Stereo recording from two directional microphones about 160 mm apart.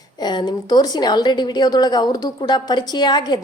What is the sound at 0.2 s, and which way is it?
A woman's voice, 25° left (ahead or behind).